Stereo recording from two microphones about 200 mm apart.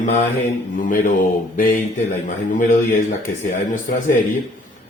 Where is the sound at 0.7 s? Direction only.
40° left (ahead or behind).